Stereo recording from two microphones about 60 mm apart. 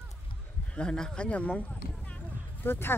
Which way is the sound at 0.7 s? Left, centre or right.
Centre.